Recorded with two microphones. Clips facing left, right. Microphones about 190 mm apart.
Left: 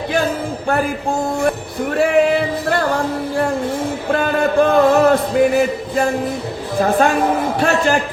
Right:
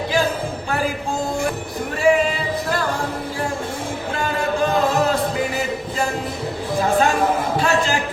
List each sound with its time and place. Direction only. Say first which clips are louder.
1.4 s music: left 5 dB; 60° left (ahead or behind)
4.1 s a sound: left 7 dB; 60° left (ahead or behind)
7.6 s a man's voice: left 6 dB; 60° left (ahead or behind)